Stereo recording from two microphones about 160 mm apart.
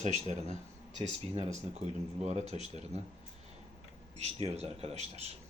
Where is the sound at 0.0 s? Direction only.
50° right (ahead or behind).